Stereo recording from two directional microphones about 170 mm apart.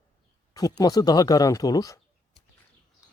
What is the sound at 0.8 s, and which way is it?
Speech, 20° left (ahead or behind).